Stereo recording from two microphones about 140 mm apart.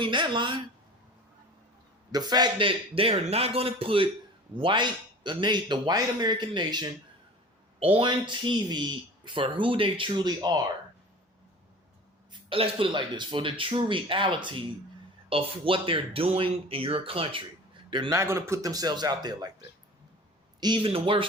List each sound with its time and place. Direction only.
0.0 s speech: 35° right (ahead or behind)
2.1 s speech: 30° right (ahead or behind)
7.9 s speech: 35° right (ahead or behind)
12.3 s speech: 40° right (ahead or behind)
18.1 s speech: 20° right (ahead or behind)
20.6 s speech: 35° right (ahead or behind)